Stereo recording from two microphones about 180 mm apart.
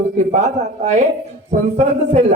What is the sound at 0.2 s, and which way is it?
A man's voice, 40° right (ahead or behind).